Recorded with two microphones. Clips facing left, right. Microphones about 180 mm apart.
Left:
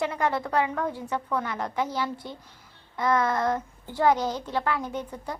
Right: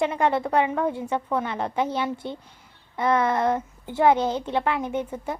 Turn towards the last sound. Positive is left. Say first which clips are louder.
# right 5 dB
turn(degrees=-25)  # may be behind; listen again after turning